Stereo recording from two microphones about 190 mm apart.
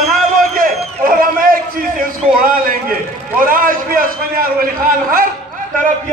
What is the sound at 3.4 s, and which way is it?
A man's voice, 45° right (ahead or behind).